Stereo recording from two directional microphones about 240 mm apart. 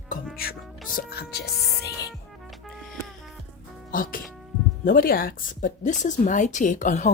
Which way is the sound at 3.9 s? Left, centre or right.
Left.